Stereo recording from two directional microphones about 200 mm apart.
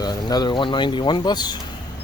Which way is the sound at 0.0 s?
20° left (ahead or behind).